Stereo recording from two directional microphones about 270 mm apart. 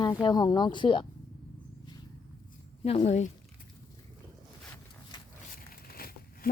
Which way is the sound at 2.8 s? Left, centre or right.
Left.